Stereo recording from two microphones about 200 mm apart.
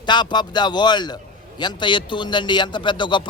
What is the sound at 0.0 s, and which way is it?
A man's voice, 20° left (ahead or behind).